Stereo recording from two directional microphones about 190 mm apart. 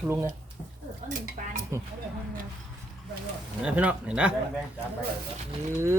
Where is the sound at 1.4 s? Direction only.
40° right (ahead or behind).